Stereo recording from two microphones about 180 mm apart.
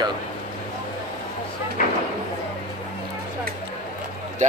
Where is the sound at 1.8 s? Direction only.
50° left (ahead or behind).